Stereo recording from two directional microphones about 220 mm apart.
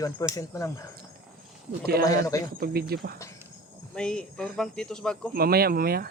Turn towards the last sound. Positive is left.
turn(degrees=-45)  # may be behind; listen again after turning